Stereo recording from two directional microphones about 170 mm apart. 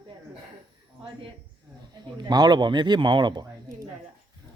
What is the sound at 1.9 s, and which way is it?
Speech, 25° right (ahead or behind).